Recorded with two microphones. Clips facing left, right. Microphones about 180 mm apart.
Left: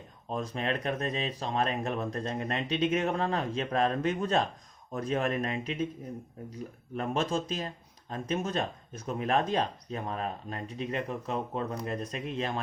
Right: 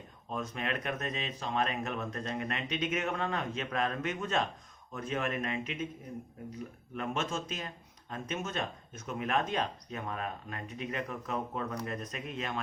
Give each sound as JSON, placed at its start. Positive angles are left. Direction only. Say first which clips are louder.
{"t": 0.3, "sound": "speech", "louder": "left 4 dB", "side_deg": 35}
{"t": 6.9, "sound": "speech", "louder": "left 5 dB", "side_deg": 35}